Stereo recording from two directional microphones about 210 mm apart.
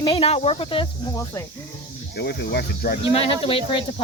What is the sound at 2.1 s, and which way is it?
Speech, 50° left (ahead or behind).